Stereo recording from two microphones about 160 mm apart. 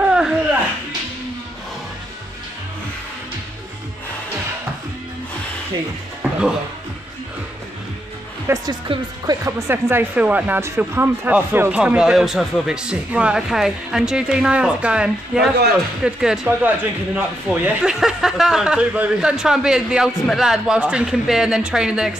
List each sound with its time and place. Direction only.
0.0 s a sound: 5° right (ahead or behind)
6.2 s music: 10° right (ahead or behind)
8.5 s speech: 15° right (ahead or behind)
8.8 s speech: 30° right (ahead or behind)
9.4 s speech: 15° right (ahead or behind)